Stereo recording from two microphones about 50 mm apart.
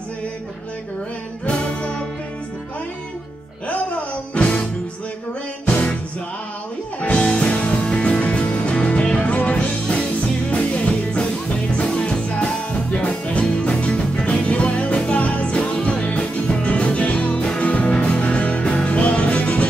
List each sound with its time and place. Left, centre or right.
1.4 s music: left
3.6 s music: left
7.2 s music: centre